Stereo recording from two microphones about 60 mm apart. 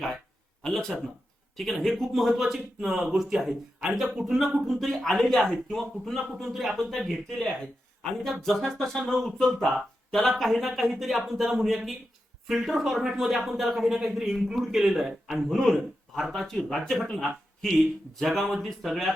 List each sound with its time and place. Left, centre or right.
0.6 s speech: centre
4.7 s speech: centre
18.4 s speech: centre